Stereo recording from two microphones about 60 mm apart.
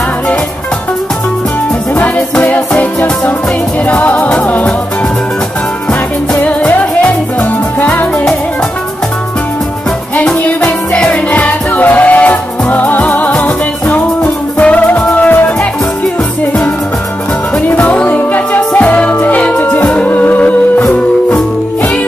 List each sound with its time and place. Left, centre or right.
2.0 s music: left
5.9 s music: left
10.1 s music: left
17.6 s music: left